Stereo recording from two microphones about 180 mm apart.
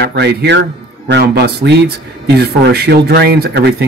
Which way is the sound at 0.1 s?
70° right (ahead or behind).